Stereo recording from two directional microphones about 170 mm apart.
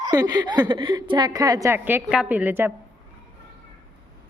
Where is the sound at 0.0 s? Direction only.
25° right (ahead or behind).